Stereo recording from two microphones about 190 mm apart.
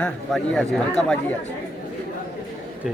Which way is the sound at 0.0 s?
5° left (ahead or behind).